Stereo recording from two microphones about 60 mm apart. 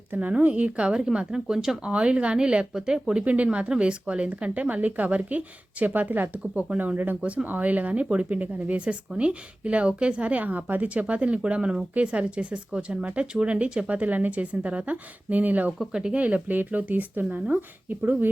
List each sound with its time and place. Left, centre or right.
0.1 s speech: right; by 1.9 s centre
1.9 s speech: centre
15.9 s speech: centre
16.2 s speech: right